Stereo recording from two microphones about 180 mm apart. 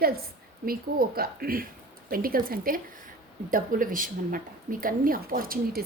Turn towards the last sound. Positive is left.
turn(degrees=-55)  # may be behind; listen again after turning